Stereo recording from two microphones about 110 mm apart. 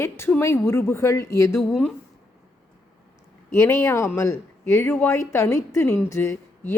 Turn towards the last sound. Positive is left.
turn(degrees=15)  # may be behind; listen again after turning